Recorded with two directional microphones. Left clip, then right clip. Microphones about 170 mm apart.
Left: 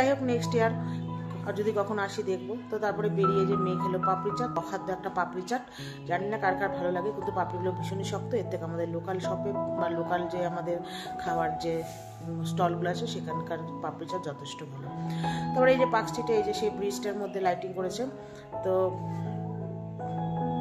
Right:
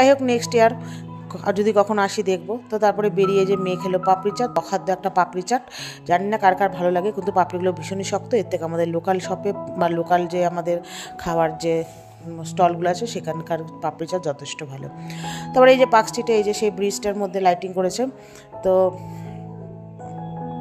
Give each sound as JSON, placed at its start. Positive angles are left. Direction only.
{"t": 0.0, "sound": "speech", "side_deg": -55}
{"t": 18.6, "sound": "music", "side_deg": -45}